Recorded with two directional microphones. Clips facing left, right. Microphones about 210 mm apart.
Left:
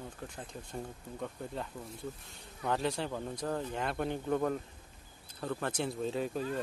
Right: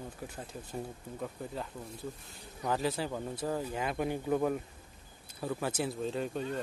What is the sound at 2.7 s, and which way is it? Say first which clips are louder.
Speech: right 1 dB; 5° right (ahead or behind).